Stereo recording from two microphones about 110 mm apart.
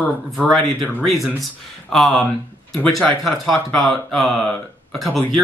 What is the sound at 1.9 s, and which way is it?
Speech, 5° left (ahead or behind).